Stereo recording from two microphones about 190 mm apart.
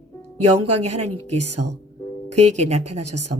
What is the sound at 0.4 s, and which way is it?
Speech, 35° right (ahead or behind).